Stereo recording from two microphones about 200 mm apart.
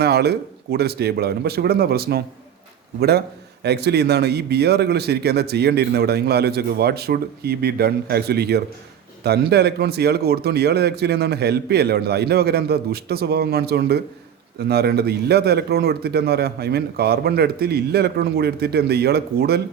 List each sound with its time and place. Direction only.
0.0 s a man's voice: 55° right (ahead or behind)